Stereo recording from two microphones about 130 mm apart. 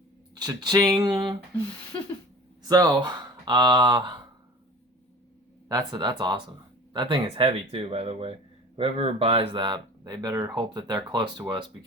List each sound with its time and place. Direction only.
0.3 s speech: 30° right (ahead or behind)
2.6 s speech: 30° right (ahead or behind)
5.6 s speech: 30° right (ahead or behind)